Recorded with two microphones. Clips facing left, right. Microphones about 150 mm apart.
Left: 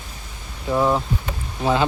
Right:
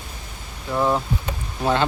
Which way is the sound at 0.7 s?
5° left (ahead or behind).